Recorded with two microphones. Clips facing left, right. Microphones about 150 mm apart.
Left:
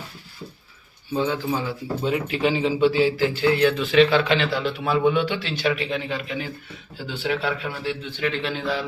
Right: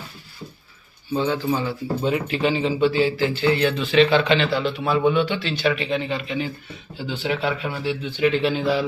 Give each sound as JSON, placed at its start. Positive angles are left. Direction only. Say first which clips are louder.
{"t": 1.1, "sound": "a man's voice", "louder": "right 2 dB", "side_deg": 10}